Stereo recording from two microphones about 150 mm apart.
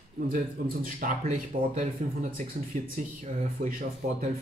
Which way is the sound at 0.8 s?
65° right (ahead or behind).